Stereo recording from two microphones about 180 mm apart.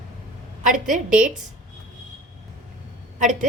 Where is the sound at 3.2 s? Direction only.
45° right (ahead or behind).